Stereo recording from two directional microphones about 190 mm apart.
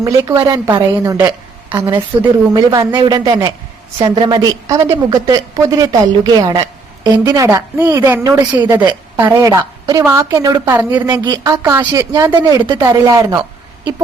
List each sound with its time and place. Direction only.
0.0 s a woman's voice: 20° right (ahead or behind)
11.1 s a woman's voice: 20° right (ahead or behind)